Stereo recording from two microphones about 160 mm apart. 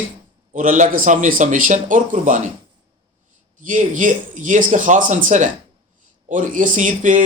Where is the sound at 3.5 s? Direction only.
55° right (ahead or behind).